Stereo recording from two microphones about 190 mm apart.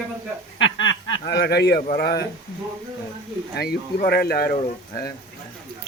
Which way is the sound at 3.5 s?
55° left (ahead or behind).